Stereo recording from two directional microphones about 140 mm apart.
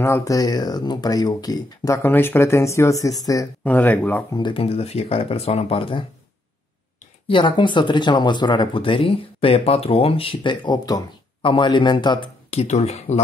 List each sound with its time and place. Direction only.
0.0 s speech: 20° left (ahead or behind)
3.6 s speech: 10° left (ahead or behind)
4.3 s speech: 35° left (ahead or behind)
7.2 s speech: 35° left (ahead or behind)
12.4 s speech: 50° left (ahead or behind)